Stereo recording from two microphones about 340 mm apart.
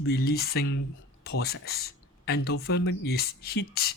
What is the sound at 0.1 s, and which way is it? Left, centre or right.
Speech, left.